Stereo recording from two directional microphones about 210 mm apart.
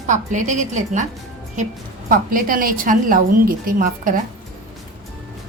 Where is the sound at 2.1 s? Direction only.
40° right (ahead or behind).